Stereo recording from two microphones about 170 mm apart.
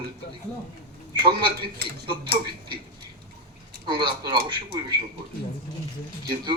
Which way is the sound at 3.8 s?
30° right (ahead or behind).